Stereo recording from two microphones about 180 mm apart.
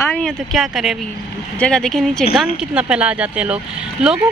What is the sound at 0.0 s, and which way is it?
Speech, 5° left (ahead or behind).